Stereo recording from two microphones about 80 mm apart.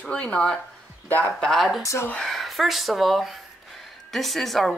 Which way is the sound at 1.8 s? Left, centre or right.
Left.